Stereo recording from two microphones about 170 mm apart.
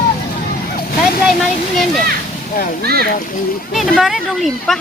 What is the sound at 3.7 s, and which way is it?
Speech, centre (ahead or behind).